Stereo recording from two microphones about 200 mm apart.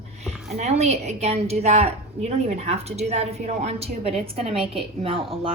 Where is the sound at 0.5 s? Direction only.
35° right (ahead or behind).